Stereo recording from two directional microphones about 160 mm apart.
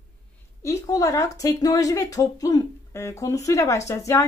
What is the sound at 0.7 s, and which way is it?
Speech, 20° left (ahead or behind).